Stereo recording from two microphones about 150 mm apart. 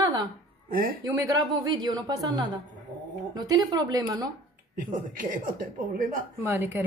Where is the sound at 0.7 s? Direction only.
75° right (ahead or behind).